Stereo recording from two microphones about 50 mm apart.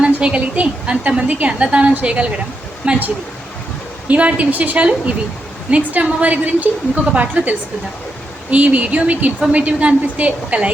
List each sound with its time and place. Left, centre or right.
0.2 s a woman's voice: right
4.1 s a woman's voice: right